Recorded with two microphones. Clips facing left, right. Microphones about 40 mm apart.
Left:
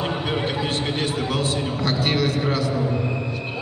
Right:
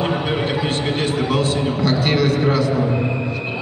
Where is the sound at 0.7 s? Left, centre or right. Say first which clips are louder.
Right 4 dB; centre.